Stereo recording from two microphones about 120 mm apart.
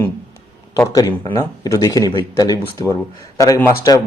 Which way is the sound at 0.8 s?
25° left (ahead or behind).